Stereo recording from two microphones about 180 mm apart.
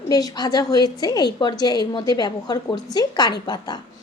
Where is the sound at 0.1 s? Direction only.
20° left (ahead or behind).